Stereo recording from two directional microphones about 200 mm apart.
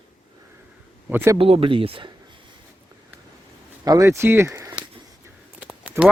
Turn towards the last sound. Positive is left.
turn(degrees=-15)  # may be behind; listen again after turning